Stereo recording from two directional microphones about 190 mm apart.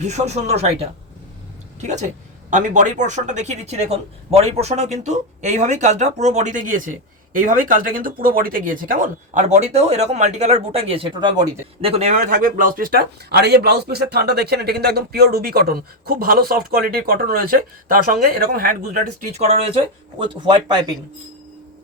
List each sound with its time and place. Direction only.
0.0 s speech: 35° right (ahead or behind)
12.1 s speech: 45° right (ahead or behind)
19.2 s speech: 35° right (ahead or behind)